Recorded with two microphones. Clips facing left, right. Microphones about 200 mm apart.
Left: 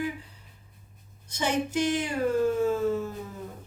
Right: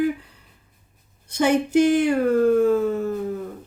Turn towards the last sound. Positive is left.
turn(degrees=-60)  # may be behind; listen again after turning